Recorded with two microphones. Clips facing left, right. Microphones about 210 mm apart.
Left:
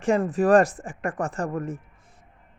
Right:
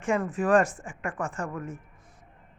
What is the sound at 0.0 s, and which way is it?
Speech, 35° left (ahead or behind).